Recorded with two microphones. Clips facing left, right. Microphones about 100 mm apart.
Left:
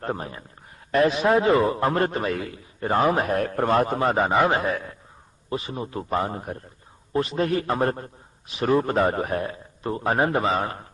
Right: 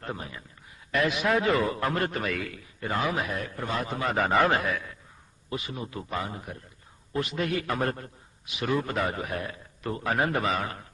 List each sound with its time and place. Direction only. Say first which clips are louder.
0.0 s a man's voice: left 7 dB; 40° left (ahead or behind)
4.2 s a man's voice: left 1 dB; 20° left (ahead or behind)
4.6 s a man's voice: left 4 dB; 35° left (ahead or behind)